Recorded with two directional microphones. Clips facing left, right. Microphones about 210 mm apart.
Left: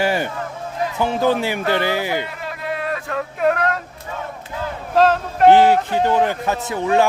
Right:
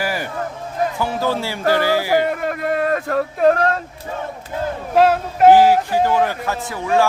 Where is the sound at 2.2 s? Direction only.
50° right (ahead or behind); by 4.2 s 35° right (ahead or behind).